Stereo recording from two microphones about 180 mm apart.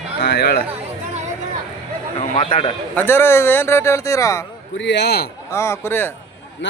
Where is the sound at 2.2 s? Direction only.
30° left (ahead or behind).